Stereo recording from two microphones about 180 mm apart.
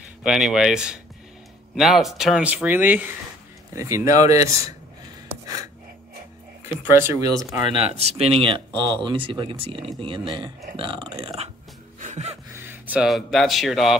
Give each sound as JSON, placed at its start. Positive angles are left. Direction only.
{"t": 0.2, "sound": "speech", "side_deg": -5}
{"t": 6.6, "sound": "speech", "side_deg": -15}
{"t": 7.9, "sound": "speech", "side_deg": -35}
{"t": 12.0, "sound": "music", "side_deg": -40}
{"t": 12.5, "sound": "speech", "side_deg": -10}